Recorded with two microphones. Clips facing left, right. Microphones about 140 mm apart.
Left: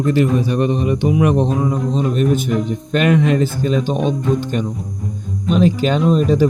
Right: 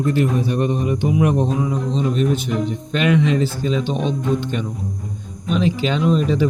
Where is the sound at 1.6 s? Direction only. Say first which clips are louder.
Left 3 dB; 50° left (ahead or behind).